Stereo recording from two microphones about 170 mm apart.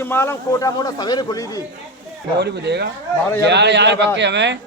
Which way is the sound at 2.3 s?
80° right.